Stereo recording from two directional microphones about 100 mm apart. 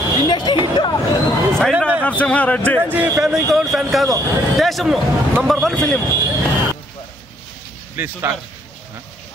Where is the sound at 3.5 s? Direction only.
Centre (ahead or behind).